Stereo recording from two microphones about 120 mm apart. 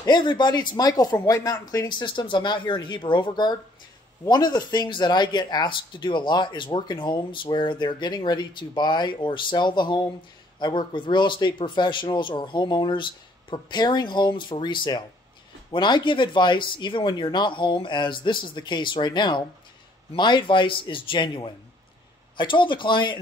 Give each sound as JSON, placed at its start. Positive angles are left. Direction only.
{"t": 0.0, "sound": "a man's voice", "side_deg": 40}